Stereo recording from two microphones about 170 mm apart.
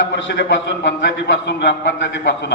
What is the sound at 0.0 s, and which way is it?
A man's voice, 90° left.